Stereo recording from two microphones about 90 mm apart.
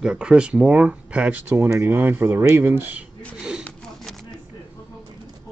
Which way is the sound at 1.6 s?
30° right (ahead or behind).